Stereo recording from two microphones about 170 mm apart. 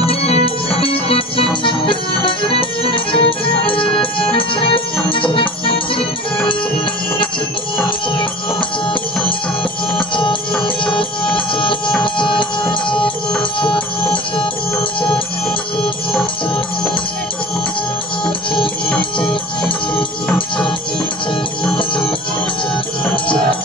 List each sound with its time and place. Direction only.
0.0 s music: 35° left (ahead or behind)
10.8 s music: 30° left (ahead or behind)
15.8 s music: 5° left (ahead or behind)